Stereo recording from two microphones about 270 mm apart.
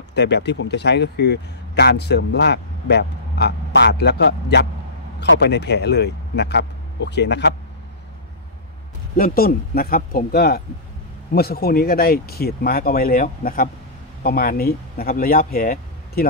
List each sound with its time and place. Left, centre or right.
0.1 s speech: left
9.1 s speech: left